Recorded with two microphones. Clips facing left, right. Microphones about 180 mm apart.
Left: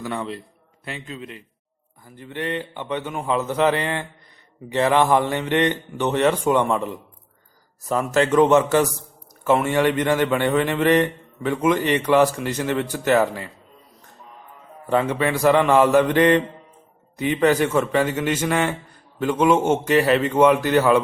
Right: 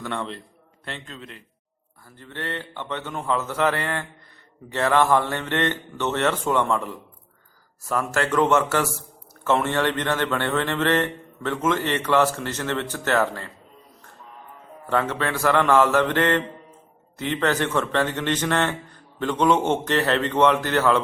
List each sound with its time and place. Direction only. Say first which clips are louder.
0.0 s a man's voice: left 2 dB; 5° left (ahead or behind)
14.8 s a man's voice: left 4 dB; 15° left (ahead or behind)